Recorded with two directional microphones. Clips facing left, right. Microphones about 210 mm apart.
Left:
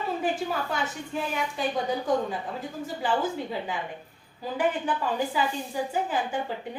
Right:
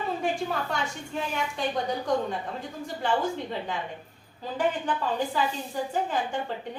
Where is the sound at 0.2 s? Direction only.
5° left (ahead or behind).